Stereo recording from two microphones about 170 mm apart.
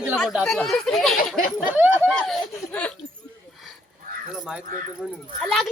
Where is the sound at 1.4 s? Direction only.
55° left (ahead or behind).